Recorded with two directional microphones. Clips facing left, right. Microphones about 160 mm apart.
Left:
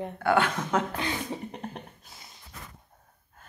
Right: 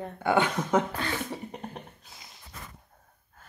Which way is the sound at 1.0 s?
15° left (ahead or behind).